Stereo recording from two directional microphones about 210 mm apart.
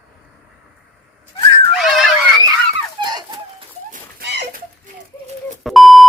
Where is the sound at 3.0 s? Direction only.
20° right (ahead or behind).